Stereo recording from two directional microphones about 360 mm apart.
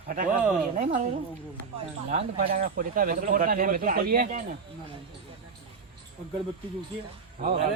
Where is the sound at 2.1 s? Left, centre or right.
Right.